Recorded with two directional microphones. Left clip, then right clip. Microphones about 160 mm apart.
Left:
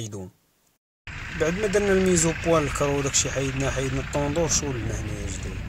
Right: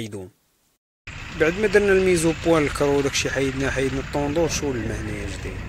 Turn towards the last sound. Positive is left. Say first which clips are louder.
# right 2 dB
turn(degrees=-20)  # may be behind; listen again after turning